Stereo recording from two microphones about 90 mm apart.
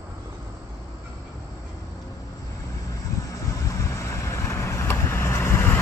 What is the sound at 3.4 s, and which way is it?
Vehicle, 35° left (ahead or behind).